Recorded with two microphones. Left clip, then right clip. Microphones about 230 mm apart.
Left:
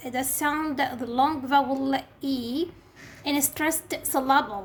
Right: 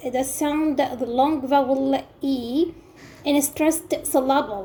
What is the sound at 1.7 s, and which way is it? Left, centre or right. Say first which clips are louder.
A woman's voice: right 5 dB; left.